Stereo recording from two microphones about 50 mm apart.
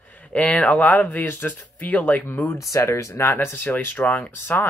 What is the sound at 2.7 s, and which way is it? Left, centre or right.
Speech, left.